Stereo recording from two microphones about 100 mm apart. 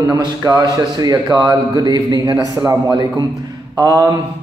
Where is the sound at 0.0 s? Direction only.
40° right (ahead or behind).